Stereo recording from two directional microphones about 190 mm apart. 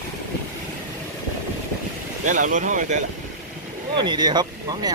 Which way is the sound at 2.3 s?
40° right (ahead or behind).